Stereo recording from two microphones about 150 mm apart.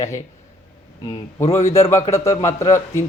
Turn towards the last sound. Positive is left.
turn(degrees=20)  # may be behind; listen again after turning